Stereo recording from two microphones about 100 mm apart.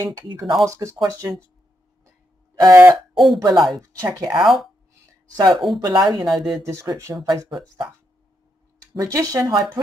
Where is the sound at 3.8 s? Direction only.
35° right (ahead or behind).